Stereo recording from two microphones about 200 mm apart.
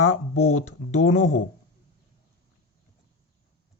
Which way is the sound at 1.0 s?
90° left.